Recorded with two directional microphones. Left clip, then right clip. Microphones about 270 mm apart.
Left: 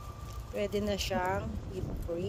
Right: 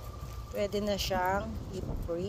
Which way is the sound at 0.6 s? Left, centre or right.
Centre.